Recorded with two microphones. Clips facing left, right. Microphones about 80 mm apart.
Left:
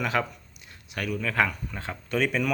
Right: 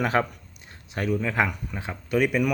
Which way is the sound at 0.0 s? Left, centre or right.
Right.